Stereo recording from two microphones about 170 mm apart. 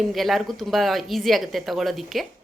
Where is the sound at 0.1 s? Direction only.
Centre (ahead or behind).